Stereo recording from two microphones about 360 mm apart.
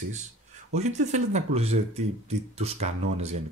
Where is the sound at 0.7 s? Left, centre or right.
Centre.